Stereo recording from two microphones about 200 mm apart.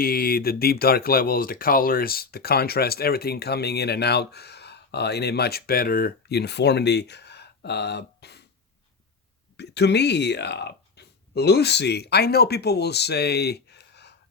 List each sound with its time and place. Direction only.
0.0 s speech: 50° left (ahead or behind)
9.6 s speech: 55° left (ahead or behind)